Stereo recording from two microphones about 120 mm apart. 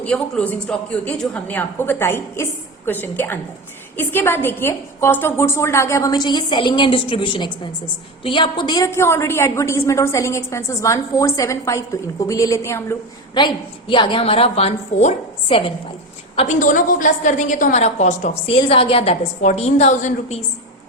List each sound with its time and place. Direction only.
0.0 s a woman's voice: 10° left (ahead or behind); by 8.9 s 35° left (ahead or behind)
8.9 s a woman's voice: 20° left (ahead or behind)
13.3 s a woman's voice: 40° left (ahead or behind); by 15.1 s 65° left (ahead or behind)
15.4 s a woman's voice: 45° left (ahead or behind)
16.5 s a woman's voice: 90° left; by 18.5 s 70° left (ahead or behind)
18.7 s a woman's voice: 50° left (ahead or behind)
19.4 s a woman's voice: 70° left (ahead or behind)